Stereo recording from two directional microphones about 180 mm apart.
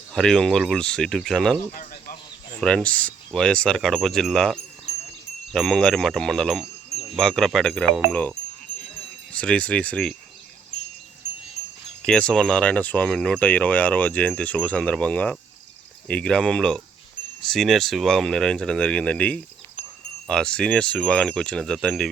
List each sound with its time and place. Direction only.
0.1 s speech: centre (ahead or behind)
1.7 s a sound: 50° left (ahead or behind)
2.6 s speech: 5° left (ahead or behind)
12.0 s speech: 5° left (ahead or behind)